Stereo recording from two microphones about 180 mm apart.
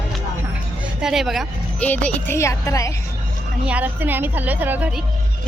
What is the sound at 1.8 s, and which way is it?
Speech, 10° left (ahead or behind).